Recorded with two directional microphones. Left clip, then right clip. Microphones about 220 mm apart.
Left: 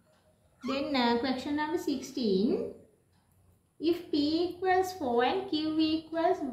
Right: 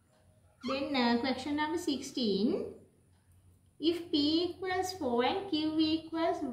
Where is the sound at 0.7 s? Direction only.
20° left (ahead or behind).